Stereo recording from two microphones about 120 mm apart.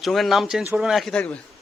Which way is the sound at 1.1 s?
10° left (ahead or behind).